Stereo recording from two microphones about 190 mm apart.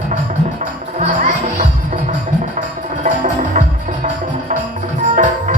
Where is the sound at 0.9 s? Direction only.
40° right (ahead or behind).